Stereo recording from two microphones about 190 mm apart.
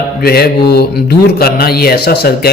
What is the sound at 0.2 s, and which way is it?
Speech, 55° left (ahead or behind).